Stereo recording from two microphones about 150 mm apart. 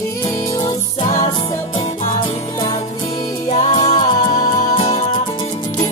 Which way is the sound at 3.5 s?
50° left (ahead or behind).